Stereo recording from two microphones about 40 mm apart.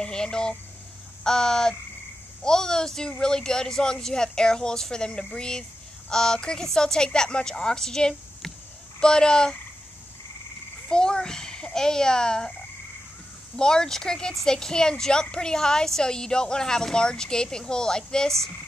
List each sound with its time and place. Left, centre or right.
0.0 s a woman's voice: left
10.9 s speech: centre
13.6 s a woman's voice: centre